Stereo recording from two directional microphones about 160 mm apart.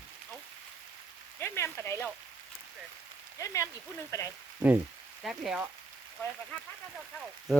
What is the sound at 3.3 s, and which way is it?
Rain on surface, 20° left (ahead or behind).